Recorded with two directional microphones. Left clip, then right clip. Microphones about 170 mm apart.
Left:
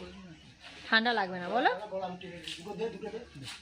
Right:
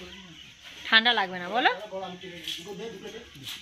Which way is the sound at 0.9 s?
10° left (ahead or behind).